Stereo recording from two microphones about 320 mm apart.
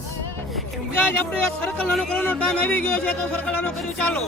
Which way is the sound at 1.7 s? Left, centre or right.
Centre.